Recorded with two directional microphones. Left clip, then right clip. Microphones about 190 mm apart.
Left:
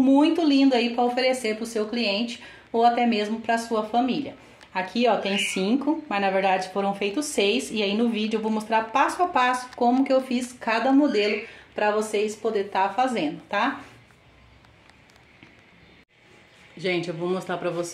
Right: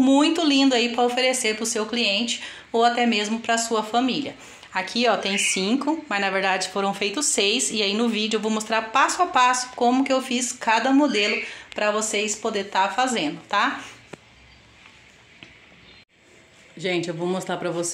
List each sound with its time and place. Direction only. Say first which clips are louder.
0.0 s speech: right 1 dB; centre (ahead or behind)
11.7 s speech: even; 20° right (ahead or behind)
12.7 s speech: right 3 dB; centre (ahead or behind)
16.7 s a man's voice: right 1 dB; 20° right (ahead or behind)
17.2 s speech: right 1 dB; 40° right (ahead or behind)